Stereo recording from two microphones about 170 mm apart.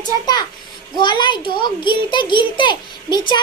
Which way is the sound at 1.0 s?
25° left (ahead or behind).